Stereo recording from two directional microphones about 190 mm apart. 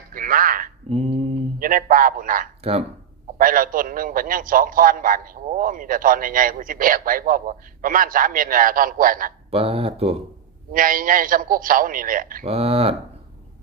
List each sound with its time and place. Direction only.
0.1 s a sound: 45° right (ahead or behind)
0.9 s mantra: 35° right (ahead or behind)
1.5 s a man's voice: 45° right (ahead or behind)
9.5 s speech: 30° right (ahead or behind)
10.7 s a man's voice: 45° right (ahead or behind)
12.5 s speech: 30° right (ahead or behind)